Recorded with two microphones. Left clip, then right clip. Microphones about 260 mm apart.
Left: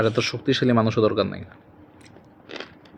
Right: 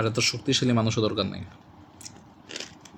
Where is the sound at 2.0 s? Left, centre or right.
Centre.